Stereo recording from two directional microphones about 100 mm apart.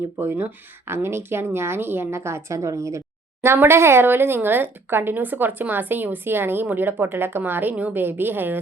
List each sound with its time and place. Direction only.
0.2 s speech: 20° right (ahead or behind)